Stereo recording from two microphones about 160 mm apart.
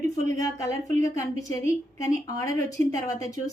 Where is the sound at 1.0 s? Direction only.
20° left (ahead or behind).